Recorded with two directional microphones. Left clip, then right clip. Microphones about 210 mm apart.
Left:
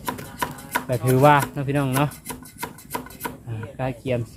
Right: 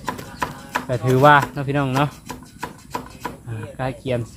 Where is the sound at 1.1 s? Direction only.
5° left (ahead or behind).